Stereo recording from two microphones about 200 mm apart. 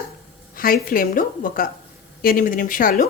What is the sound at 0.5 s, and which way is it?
Speech, 45° left (ahead or behind).